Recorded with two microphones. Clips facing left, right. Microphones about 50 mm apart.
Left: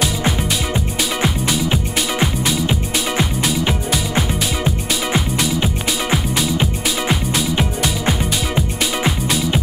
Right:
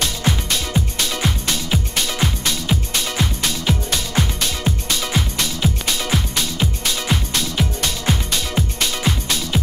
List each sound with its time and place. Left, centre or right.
0.7 s music: centre
5.1 s music: centre
9.0 s music: centre